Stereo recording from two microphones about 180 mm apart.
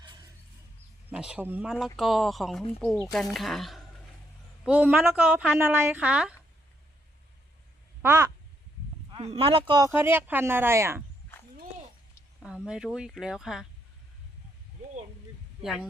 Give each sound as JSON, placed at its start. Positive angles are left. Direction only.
{"t": 1.1, "sound": "speech", "side_deg": -5}
{"t": 8.0, "sound": "speech", "side_deg": -15}
{"t": 9.1, "sound": "speech", "side_deg": -30}
{"t": 9.9, "sound": "speech", "side_deg": -10}
{"t": 12.4, "sound": "speech", "side_deg": -5}
{"t": 15.6, "sound": "speech", "side_deg": 0}